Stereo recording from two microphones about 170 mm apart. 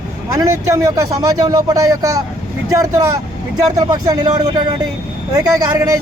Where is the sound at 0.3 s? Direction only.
15° right (ahead or behind).